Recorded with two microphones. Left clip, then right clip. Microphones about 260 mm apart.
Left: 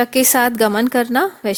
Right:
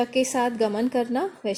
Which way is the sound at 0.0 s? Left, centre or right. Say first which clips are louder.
Left 8 dB; left.